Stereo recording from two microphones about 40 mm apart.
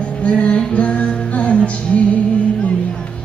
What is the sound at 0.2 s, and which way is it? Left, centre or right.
Music, left.